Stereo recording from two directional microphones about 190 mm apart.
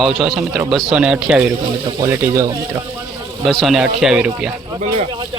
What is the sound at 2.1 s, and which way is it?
Speech, 15° right (ahead or behind).